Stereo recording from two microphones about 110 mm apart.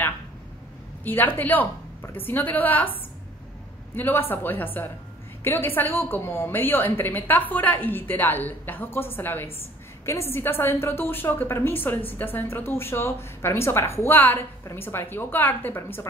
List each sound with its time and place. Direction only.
1.0 s a woman's voice: 15° left (ahead or behind)